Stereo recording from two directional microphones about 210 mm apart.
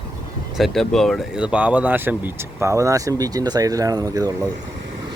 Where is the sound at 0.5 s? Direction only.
Centre (ahead or behind); by 4.4 s 15° right (ahead or behind).